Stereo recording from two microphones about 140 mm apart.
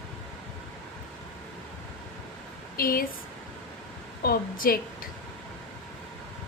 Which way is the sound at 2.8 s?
90° left.